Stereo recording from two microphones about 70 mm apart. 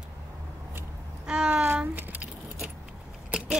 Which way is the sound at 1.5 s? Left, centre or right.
Right.